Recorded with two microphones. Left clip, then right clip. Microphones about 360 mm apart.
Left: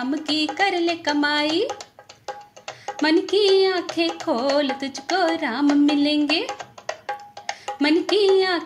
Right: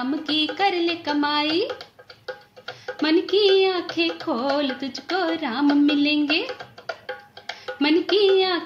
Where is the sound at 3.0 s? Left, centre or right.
Left.